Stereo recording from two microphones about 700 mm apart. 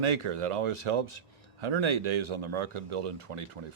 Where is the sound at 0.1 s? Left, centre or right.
Right.